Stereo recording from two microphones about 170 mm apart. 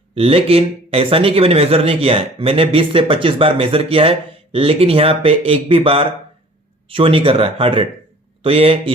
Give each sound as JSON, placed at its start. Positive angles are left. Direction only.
{"t": 0.1, "sound": "speech", "side_deg": -35}